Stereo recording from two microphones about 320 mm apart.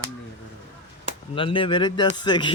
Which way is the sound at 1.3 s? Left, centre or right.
Centre.